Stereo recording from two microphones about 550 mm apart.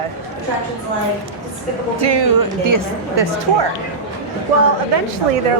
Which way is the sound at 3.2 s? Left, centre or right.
Right.